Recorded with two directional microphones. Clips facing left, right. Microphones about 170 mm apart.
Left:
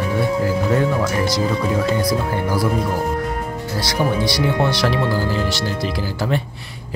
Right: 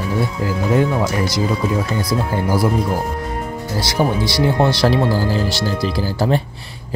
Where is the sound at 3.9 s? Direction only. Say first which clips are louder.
Right 1 dB; 30° right (ahead or behind).